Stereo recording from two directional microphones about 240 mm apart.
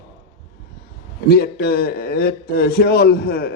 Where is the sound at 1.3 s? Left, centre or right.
Left.